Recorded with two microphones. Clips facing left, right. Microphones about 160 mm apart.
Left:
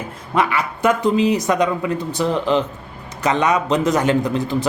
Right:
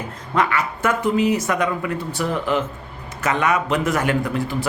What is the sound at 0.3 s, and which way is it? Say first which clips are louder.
Speech: left 1 dB; 15° left (ahead or behind).